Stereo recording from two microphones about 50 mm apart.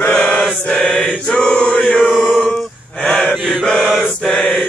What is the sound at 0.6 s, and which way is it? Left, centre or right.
Mantra, centre.